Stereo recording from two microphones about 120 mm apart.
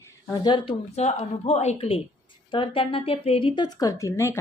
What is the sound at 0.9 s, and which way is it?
A woman's voice, 65° left (ahead or behind).